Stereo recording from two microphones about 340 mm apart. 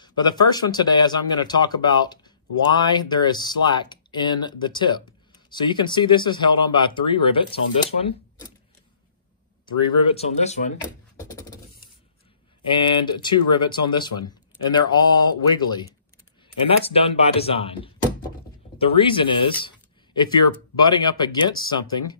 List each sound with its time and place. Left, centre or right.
0.0 s speech: centre
10.1 s speech: centre
15.2 s speech: centre